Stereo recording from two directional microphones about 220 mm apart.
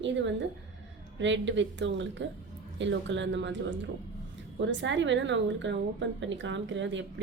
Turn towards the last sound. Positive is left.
turn(degrees=-55)  # may be behind; listen again after turning